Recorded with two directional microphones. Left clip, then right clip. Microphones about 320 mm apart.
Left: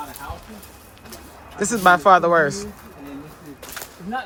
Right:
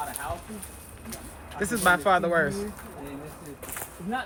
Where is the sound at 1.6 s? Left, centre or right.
Centre.